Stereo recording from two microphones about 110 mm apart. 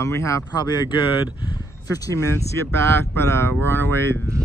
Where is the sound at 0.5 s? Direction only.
40° left (ahead or behind).